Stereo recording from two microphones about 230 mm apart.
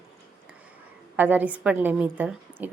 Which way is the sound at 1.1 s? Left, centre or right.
Centre.